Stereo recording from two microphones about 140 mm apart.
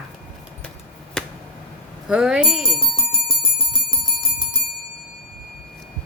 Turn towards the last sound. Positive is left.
turn(degrees=30)  # may be behind; listen again after turning